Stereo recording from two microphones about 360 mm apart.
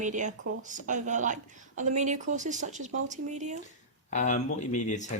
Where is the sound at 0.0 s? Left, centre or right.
Right.